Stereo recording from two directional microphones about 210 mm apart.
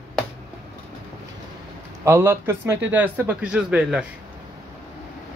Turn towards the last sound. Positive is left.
turn(degrees=-5)  # may be behind; listen again after turning